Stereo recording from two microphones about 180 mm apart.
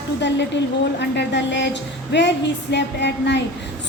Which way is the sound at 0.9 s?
75° left (ahead or behind).